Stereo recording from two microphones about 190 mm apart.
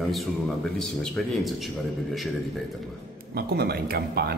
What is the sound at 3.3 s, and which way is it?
Speech, 55° right (ahead or behind).